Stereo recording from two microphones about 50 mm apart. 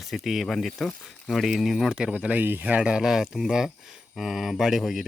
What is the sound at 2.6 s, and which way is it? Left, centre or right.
Speech, right.